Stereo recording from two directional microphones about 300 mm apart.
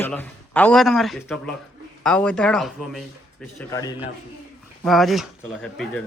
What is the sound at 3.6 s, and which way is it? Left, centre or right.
Speech, centre.